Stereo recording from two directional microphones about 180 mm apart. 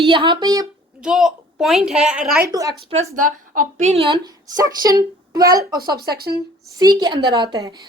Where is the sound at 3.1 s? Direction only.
50° right (ahead or behind).